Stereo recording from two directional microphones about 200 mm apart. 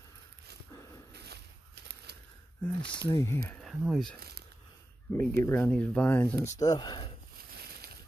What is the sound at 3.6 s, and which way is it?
Speech, centre (ahead or behind).